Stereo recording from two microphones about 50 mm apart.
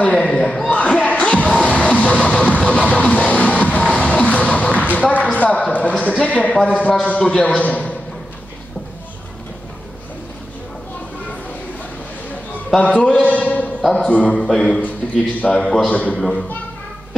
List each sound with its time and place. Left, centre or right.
0.0 s a man's voice: left
0.3 s music: centre
6.5 s a man's voice: left
13.1 s a sound: left
13.9 s a man's voice: left
14.5 s a man's voice: centre
15.9 s a man's voice: left